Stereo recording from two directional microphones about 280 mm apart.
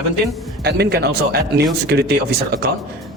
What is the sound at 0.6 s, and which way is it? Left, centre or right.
A man's voice, right.